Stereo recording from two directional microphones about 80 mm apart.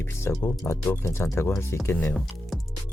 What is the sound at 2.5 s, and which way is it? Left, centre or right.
Music, centre.